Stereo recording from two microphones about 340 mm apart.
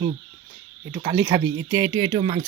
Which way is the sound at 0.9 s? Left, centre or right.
Centre.